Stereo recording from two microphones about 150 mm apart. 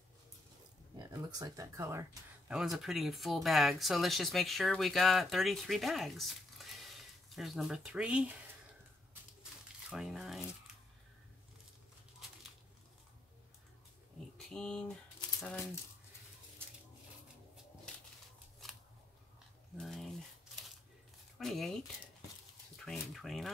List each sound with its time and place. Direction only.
1.1 s speech: 20° right (ahead or behind)
2.5 s speech: centre (ahead or behind)
9.4 s crumpling: 5° right (ahead or behind)
14.5 s speech: 5° left (ahead or behind)
19.8 s a sound: centre (ahead or behind)
21.4 s speech: centre (ahead or behind)
23.1 s speech: centre (ahead or behind)